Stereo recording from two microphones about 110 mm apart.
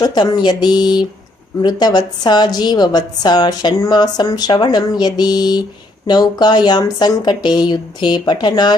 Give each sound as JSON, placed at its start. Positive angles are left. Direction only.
{"t": 0.0, "sound": "a woman's voice", "side_deg": 40}